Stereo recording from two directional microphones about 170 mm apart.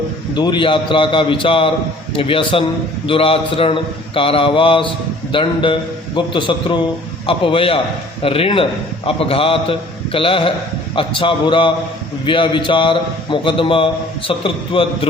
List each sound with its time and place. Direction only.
0.3 s a man's voice: 25° left (ahead or behind)